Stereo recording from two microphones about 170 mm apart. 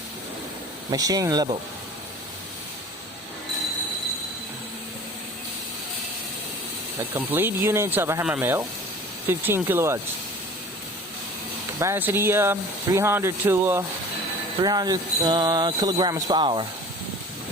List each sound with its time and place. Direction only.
0.9 s speech: 20° right (ahead or behind)
7.1 s speech: 10° right (ahead or behind)
11.8 s speech: 15° right (ahead or behind)